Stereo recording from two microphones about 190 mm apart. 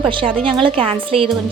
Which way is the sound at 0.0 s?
25° right (ahead or behind).